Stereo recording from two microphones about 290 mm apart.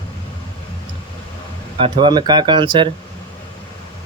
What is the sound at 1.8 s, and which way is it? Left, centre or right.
Speech, centre.